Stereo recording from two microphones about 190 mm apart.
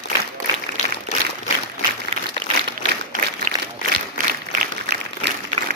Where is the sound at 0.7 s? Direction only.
60° left (ahead or behind).